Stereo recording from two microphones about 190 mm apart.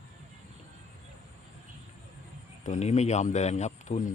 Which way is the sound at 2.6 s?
40° left (ahead or behind).